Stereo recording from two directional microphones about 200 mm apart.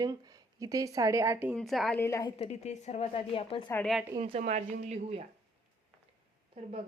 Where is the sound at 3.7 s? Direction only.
Centre (ahead or behind).